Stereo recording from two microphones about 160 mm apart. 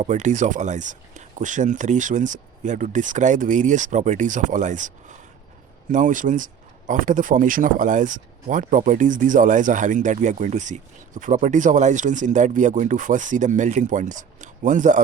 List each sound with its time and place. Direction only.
0.0 s speech: 50° right (ahead or behind)